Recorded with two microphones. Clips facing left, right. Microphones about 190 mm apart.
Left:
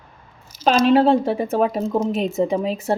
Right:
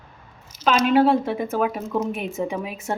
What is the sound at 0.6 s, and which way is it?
A woman's voice, 30° left (ahead or behind).